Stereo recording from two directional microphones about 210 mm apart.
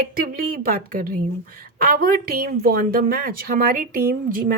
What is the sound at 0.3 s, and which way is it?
A woman's voice, 40° right (ahead or behind).